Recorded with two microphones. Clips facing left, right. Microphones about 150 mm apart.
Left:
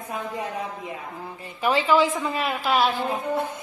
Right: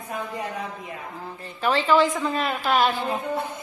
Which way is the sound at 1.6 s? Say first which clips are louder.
Even; 10° left (ahead or behind).